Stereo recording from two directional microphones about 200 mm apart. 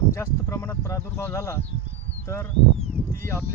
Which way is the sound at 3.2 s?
10° left (ahead or behind).